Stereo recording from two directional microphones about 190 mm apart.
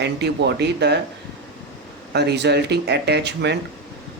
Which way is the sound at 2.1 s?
60° right (ahead or behind).